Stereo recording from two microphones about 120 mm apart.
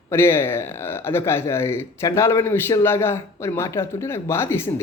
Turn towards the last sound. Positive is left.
turn(degrees=20)  # may be behind; listen again after turning